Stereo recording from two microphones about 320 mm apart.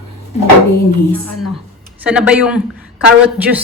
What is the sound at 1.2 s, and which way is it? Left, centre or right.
Speech, left.